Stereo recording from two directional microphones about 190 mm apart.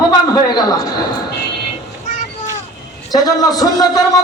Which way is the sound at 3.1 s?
20° left (ahead or behind).